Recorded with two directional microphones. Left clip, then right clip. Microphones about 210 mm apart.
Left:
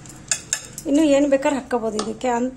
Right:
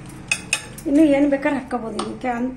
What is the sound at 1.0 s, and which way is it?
A woman's voice, 50° left (ahead or behind).